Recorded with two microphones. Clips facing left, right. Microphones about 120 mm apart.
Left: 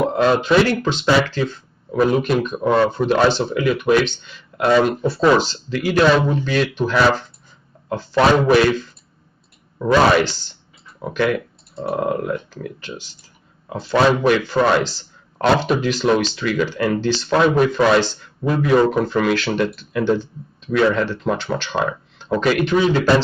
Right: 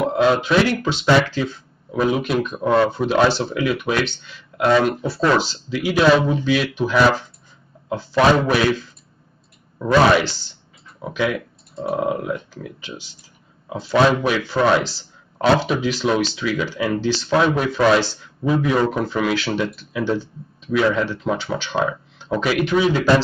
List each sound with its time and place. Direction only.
0.0 s speech: 5° right (ahead or behind)
11.0 s speech: centre (ahead or behind)
13.7 s speech: 5° right (ahead or behind)